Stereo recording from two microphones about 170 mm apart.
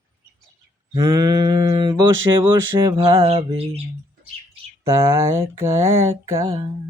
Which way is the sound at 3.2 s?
35° right (ahead or behind).